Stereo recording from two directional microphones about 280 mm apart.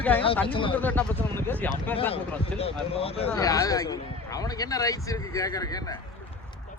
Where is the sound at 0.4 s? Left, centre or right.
Centre.